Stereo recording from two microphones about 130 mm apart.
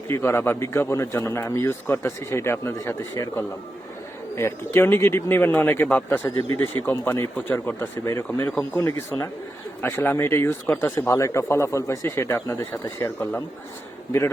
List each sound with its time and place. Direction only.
0.1 s a man's voice: 20° left (ahead or behind)